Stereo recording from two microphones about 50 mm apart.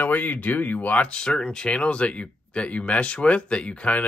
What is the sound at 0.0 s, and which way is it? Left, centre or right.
Speech, left.